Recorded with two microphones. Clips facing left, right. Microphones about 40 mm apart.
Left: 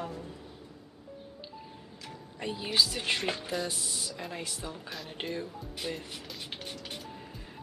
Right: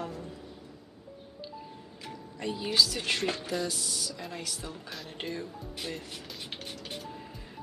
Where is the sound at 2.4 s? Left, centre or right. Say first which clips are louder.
Right 1 dB; centre.